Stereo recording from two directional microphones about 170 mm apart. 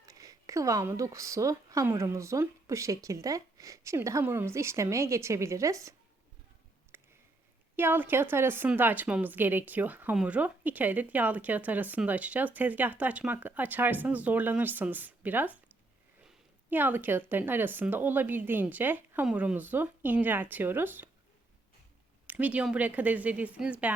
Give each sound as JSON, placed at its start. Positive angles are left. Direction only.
{"t": 0.0, "sound": "a woman's voice", "side_deg": -20}
{"t": 6.9, "sound": "a sound", "side_deg": -15}
{"t": 7.8, "sound": "a woman's voice", "side_deg": -10}
{"t": 22.3, "sound": "a woman's voice", "side_deg": -10}